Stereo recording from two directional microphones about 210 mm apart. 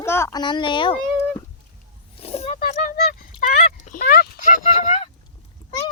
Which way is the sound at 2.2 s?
30° left (ahead or behind).